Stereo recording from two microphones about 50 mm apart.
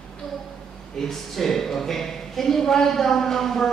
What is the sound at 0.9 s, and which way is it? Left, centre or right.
Speech, centre.